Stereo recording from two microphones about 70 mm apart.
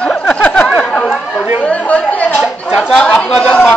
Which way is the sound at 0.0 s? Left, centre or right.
Centre.